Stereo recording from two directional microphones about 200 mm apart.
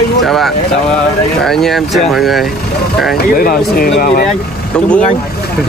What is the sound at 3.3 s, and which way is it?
Speech, 45° left (ahead or behind).